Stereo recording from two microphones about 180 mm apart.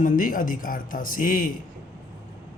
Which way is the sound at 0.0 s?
50° left (ahead or behind).